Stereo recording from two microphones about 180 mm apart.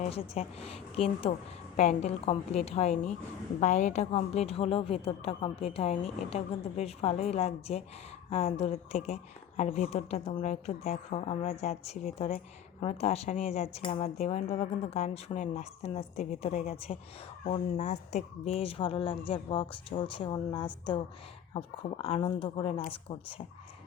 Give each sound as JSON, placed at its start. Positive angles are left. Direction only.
{"t": 0.0, "sound": "a woman's voice", "side_deg": 35}